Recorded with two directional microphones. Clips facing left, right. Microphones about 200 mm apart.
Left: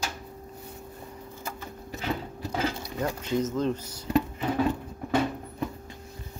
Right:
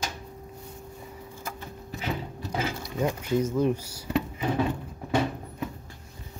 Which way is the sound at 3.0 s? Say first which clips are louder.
Right 2 dB; 10° right (ahead or behind).